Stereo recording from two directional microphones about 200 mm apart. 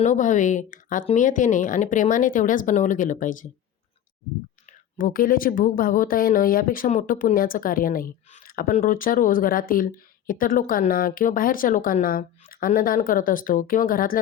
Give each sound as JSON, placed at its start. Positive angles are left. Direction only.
{"t": 0.0, "sound": "speech", "side_deg": 40}
{"t": 4.9, "sound": "speech", "side_deg": 45}